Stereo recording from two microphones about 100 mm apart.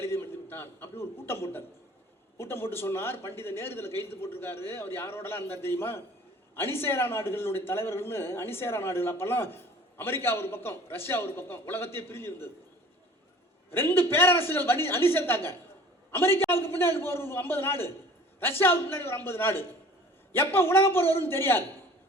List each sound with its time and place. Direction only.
0.0 s a man's voice: 25° left (ahead or behind)
13.7 s a man's voice: 20° left (ahead or behind)